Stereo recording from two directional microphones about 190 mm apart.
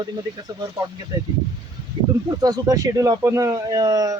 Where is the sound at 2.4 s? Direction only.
20° right (ahead or behind).